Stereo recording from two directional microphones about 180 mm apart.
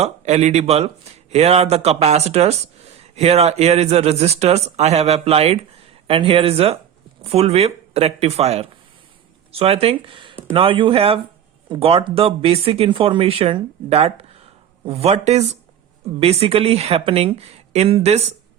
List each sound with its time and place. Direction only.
0.0 s speech: 40° right (ahead or behind)